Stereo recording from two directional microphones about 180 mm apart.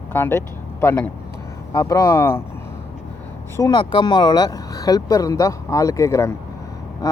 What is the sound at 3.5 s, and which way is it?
Speech, 20° left (ahead or behind).